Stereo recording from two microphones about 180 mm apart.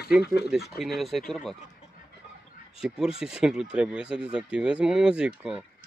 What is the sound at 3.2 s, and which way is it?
Speech, 5° right (ahead or behind).